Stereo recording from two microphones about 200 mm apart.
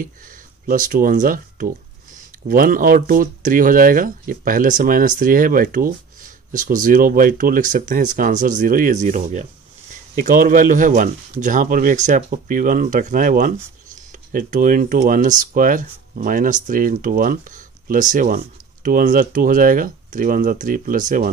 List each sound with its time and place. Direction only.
0.7 s speech: 40° right (ahead or behind)